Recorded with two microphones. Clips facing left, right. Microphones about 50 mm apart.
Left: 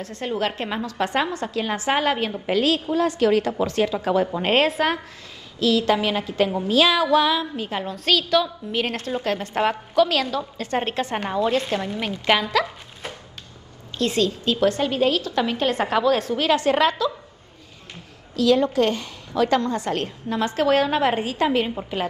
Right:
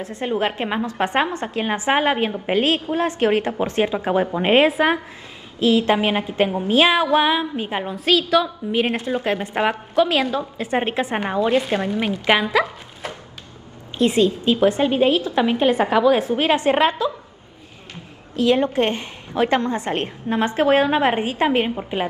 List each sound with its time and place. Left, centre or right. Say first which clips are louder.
0.0 s a woman's voice: right 3 dB; right
5.6 s a woman's voice: right 2 dB; right
13.9 s a woman's voice: right 5 dB; right
18.3 s a woman's voice: right 1 dB; right